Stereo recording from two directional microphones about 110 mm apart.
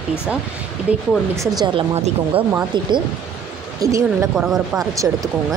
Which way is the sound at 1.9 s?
75° right (ahead or behind).